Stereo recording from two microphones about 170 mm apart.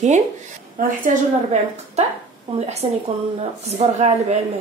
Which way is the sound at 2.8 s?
30° right (ahead or behind).